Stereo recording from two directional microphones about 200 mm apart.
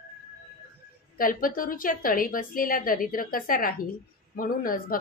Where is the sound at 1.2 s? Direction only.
45° left (ahead or behind).